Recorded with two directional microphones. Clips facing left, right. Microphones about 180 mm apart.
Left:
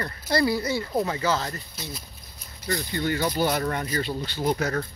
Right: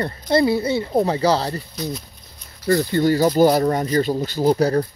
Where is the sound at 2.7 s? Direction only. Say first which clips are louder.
Right 11 dB; 55° right (ahead or behind).